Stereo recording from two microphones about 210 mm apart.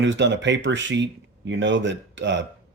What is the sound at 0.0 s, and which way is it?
Speech, 60° right (ahead or behind).